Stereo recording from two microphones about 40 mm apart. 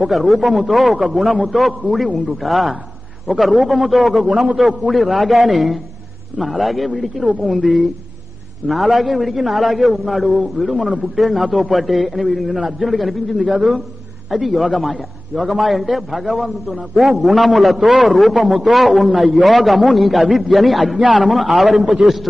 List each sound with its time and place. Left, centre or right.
0.0 s a man's voice: centre
7.5 s a man's voice: right
8.6 s a man's voice: centre
10.8 s a man's voice: right
11.1 s a man's voice: centre